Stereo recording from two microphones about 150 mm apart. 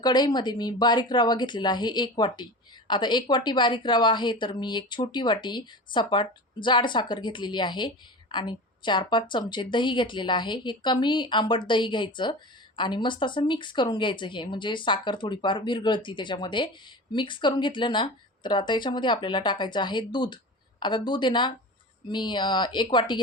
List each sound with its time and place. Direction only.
0.0 s speech: 30° left (ahead or behind)